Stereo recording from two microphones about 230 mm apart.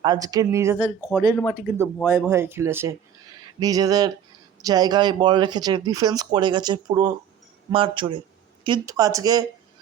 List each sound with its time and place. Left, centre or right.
0.0 s speech: centre